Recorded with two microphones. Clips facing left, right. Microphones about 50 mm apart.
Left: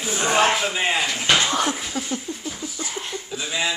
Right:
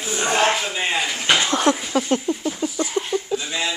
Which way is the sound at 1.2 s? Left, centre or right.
Centre.